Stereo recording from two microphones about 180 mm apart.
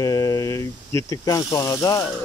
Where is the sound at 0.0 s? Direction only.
20° left (ahead or behind).